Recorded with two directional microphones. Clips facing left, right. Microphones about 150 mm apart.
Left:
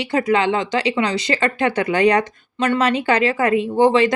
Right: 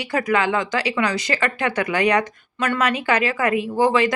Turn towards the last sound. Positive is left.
turn(degrees=30)  # may be behind; listen again after turning